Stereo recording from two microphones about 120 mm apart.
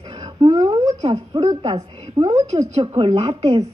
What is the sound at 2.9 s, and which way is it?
Speech, 50° right (ahead or behind).